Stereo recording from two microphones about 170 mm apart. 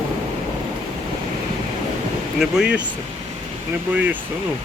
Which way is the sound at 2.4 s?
5° right (ahead or behind).